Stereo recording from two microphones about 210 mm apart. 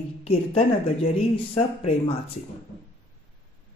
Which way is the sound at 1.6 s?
25° left (ahead or behind).